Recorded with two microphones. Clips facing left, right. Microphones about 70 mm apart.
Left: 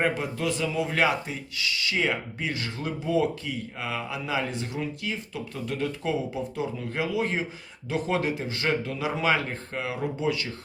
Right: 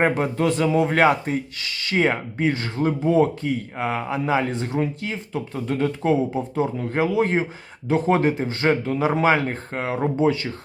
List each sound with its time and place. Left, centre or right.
0.0 s speech: right